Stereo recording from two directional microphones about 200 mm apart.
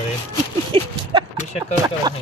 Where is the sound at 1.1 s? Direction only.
20° right (ahead or behind).